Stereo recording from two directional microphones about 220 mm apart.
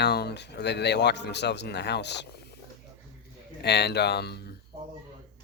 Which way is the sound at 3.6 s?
50° left (ahead or behind).